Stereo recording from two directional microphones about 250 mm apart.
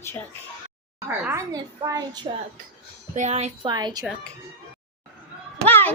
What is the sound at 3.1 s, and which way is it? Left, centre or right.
Speech, right.